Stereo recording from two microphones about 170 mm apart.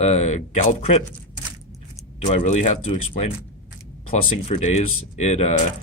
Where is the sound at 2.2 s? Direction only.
40° left (ahead or behind).